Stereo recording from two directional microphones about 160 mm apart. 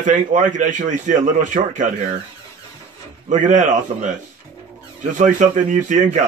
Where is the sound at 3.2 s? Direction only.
50° right (ahead or behind).